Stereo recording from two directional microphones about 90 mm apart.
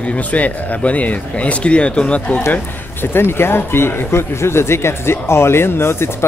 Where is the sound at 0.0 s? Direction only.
15° left (ahead or behind).